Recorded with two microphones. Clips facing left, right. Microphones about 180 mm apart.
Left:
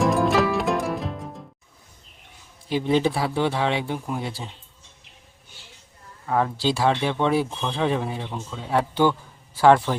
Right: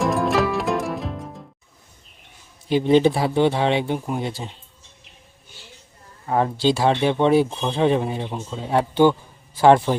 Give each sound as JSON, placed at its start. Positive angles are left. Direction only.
{"t": 0.0, "sound": "music", "side_deg": 0}
{"t": 2.6, "sound": "speech", "side_deg": -25}
{"t": 6.2, "sound": "speech", "side_deg": -25}
{"t": 8.3, "sound": "speech", "side_deg": -15}
{"t": 8.5, "sound": "speech", "side_deg": -25}